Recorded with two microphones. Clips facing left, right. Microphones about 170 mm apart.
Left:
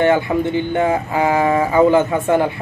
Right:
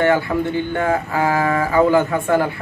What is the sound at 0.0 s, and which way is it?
Speech, 20° left (ahead or behind).